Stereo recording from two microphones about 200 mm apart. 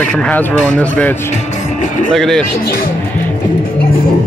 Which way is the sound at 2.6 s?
50° left (ahead or behind).